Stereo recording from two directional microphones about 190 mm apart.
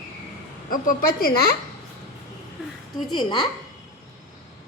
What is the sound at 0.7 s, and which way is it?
Speech, 50° left (ahead or behind).